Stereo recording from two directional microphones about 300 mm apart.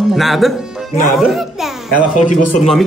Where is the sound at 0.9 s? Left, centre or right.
Left.